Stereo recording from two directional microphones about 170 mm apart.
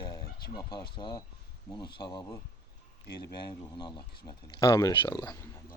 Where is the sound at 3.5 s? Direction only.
25° left (ahead or behind).